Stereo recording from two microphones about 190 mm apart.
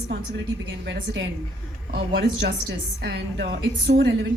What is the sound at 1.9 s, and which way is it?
A woman's voice, 60° right (ahead or behind).